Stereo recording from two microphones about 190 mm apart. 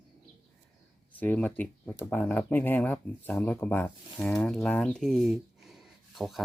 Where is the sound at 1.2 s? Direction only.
10° left (ahead or behind).